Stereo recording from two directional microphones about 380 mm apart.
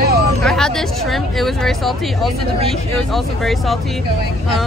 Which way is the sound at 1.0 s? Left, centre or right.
Centre.